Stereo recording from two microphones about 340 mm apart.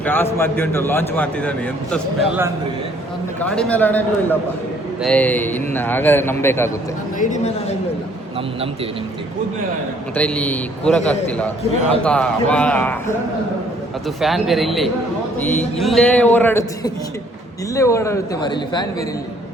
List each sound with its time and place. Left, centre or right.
0.0 s a man's voice: centre
3.4 s a man's voice: centre
7.2 s a woman's voice: left
10.2 s a man's voice: centre
14.2 s a man's voice: centre